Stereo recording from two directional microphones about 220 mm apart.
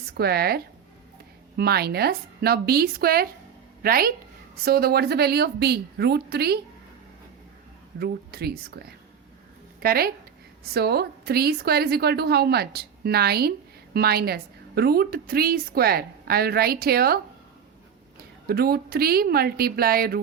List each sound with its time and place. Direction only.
0.1 s a woman's voice: 45° right (ahead or behind)
7.9 s a woman's voice: 45° right (ahead or behind)
9.8 s a woman's voice: 45° right (ahead or behind)
18.2 s a woman's voice: 45° right (ahead or behind)